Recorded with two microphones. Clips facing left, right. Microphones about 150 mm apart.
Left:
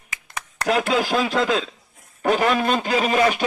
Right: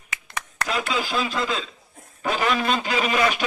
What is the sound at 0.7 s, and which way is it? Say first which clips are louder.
Speech: left 7 dB; 70° left (ahead or behind).